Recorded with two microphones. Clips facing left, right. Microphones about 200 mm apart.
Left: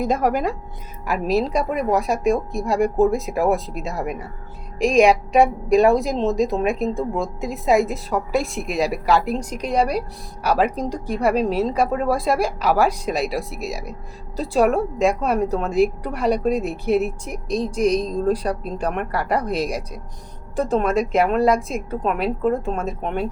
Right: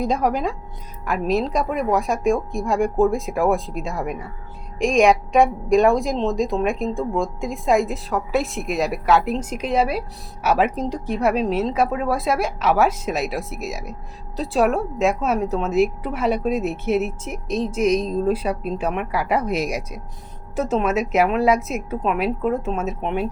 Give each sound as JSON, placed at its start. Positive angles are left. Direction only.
{"t": 0.0, "sound": "a woman's voice", "side_deg": 5}